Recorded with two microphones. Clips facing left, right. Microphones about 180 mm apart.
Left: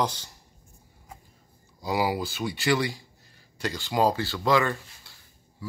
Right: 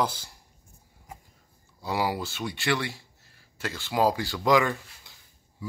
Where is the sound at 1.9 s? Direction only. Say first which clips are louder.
Left 2 dB; 5° left (ahead or behind).